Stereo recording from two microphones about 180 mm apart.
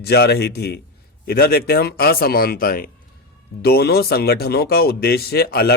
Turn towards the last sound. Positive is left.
turn(degrees=60)  # may be behind; listen again after turning